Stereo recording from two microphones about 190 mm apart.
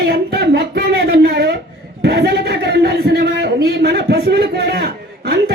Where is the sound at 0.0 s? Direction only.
55° right (ahead or behind).